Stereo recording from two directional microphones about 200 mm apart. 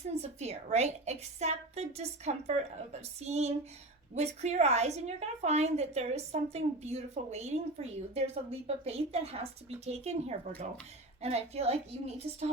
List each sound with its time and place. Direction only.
0.1 s a woman's voice: 35° right (ahead or behind)